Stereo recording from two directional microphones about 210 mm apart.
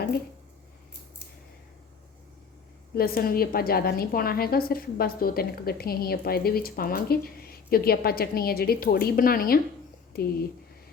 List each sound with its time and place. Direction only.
2.9 s a woman's voice: 45° left (ahead or behind)